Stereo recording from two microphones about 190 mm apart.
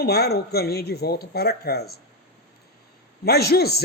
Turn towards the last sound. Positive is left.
turn(degrees=55)  # may be behind; listen again after turning